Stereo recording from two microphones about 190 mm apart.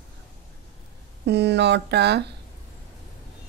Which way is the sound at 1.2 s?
65° right (ahead or behind).